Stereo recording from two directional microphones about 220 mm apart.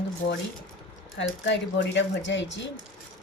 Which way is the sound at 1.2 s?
55° left (ahead or behind).